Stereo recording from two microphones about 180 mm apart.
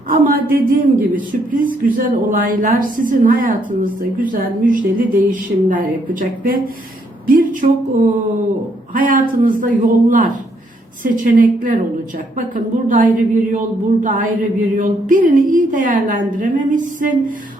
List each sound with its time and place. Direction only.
0.1 s a woman's voice: 50° right (ahead or behind)